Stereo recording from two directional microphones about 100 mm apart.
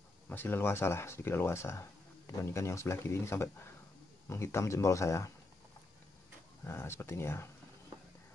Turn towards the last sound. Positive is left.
turn(degrees=25)  # may be behind; listen again after turning